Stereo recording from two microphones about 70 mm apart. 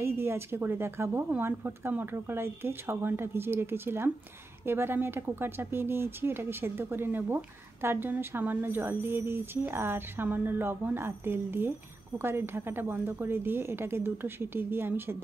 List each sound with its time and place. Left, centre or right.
0.0 s speech: right